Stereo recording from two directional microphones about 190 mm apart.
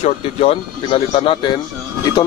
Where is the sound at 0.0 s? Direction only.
30° left (ahead or behind).